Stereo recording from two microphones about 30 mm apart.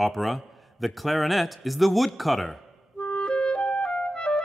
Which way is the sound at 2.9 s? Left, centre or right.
Left.